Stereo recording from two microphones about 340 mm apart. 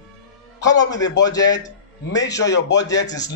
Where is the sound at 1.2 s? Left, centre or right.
Centre.